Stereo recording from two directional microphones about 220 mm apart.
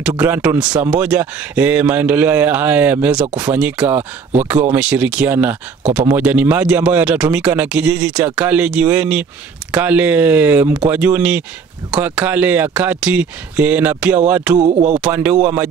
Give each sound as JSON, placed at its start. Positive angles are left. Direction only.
{"t": 0.2, "sound": "a man's voice", "side_deg": -10}
{"t": 14.6, "sound": "speech", "side_deg": -35}
{"t": 15.0, "sound": "a man's voice", "side_deg": -5}